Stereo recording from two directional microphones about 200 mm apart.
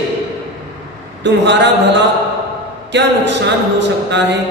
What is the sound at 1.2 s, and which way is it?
Speech, 60° right (ahead or behind).